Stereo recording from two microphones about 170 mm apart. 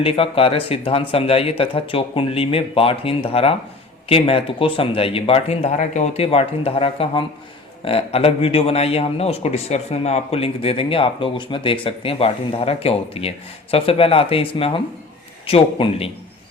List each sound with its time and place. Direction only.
0.0 s a man's voice: 35° left (ahead or behind)